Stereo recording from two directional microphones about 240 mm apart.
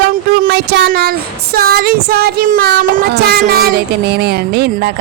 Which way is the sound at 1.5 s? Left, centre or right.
Right.